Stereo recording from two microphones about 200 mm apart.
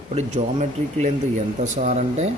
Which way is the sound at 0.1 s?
35° right (ahead or behind).